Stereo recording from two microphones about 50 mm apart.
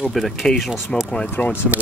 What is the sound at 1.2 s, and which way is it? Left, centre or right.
Speech, left.